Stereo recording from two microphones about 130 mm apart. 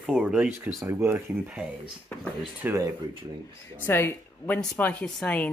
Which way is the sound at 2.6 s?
20° right (ahead or behind).